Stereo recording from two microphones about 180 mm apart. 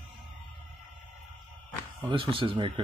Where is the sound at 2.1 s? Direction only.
30° right (ahead or behind).